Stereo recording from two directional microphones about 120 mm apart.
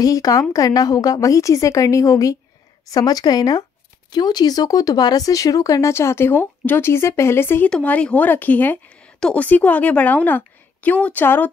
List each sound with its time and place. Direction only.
0.0 s a woman's voice: 30° left (ahead or behind)